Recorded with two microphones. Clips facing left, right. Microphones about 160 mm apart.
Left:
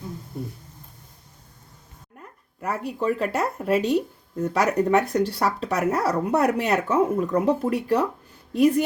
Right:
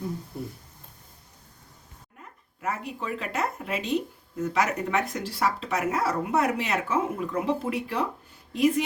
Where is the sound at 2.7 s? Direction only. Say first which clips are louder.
Left 7 dB; 40° left (ahead or behind).